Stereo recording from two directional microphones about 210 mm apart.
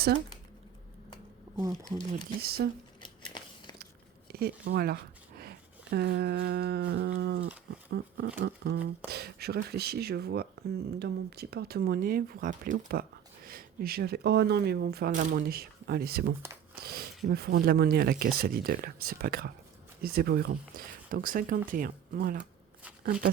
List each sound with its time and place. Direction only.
2.4 s speech: 45° right (ahead or behind)
3.0 s biting: 20° left (ahead or behind)
4.3 s speech: 50° right (ahead or behind)